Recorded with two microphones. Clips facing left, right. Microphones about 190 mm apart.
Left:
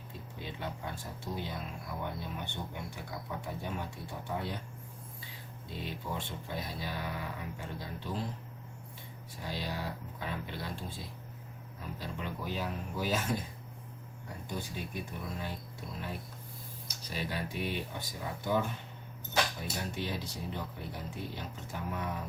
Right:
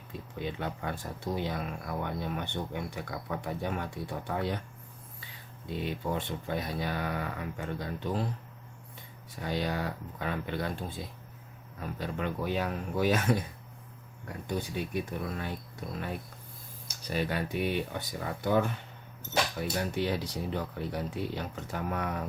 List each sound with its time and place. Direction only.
0.3 s speech: 60° right (ahead or behind)
5.6 s speech: 60° right (ahead or behind)
9.4 s speech: 60° right (ahead or behind)
14.4 s speech: 60° right (ahead or behind)
17.1 s speech: 60° right (ahead or behind)